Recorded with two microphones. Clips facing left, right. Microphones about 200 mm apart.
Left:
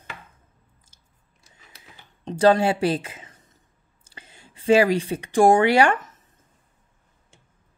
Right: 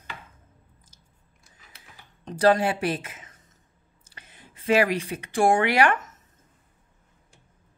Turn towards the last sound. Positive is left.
turn(degrees=30)  # may be behind; listen again after turning